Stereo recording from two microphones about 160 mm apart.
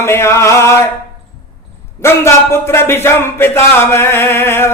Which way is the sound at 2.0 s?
15° left (ahead or behind).